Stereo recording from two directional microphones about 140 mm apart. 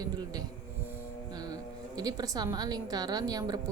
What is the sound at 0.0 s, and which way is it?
Speech, 30° right (ahead or behind).